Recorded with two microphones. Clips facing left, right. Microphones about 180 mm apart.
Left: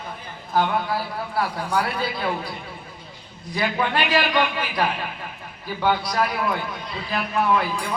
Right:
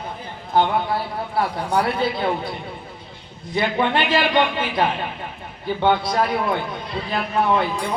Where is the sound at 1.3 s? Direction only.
25° right (ahead or behind).